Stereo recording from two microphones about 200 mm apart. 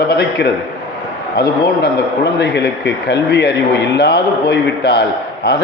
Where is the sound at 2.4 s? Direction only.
55° left (ahead or behind).